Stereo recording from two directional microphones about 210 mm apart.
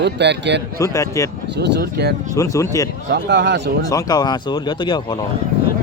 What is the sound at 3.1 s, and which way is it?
Speech, 55° right (ahead or behind).